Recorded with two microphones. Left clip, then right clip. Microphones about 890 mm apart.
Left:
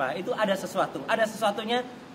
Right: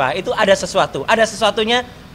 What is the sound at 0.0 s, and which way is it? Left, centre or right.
Speech, right.